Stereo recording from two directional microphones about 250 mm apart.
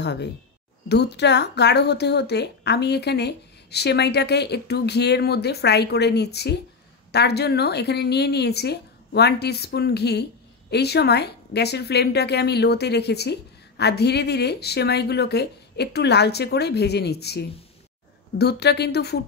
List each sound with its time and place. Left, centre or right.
0.0 s a woman's voice: left